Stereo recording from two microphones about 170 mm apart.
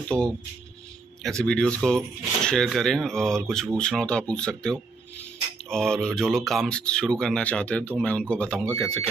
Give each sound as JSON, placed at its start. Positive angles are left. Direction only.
{"t": 0.1, "sound": "speech", "side_deg": -20}
{"t": 1.2, "sound": "speech", "side_deg": 5}